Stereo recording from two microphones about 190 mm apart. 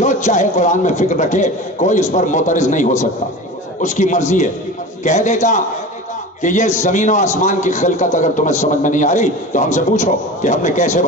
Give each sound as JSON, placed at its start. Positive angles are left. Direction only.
{"t": 0.0, "sound": "a man's voice", "side_deg": 40}